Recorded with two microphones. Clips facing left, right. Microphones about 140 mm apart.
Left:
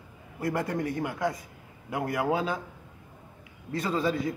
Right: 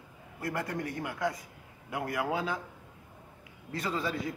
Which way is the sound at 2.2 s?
20° left (ahead or behind).